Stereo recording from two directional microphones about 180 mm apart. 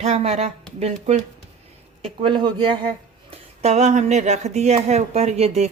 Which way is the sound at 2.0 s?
30° right (ahead or behind).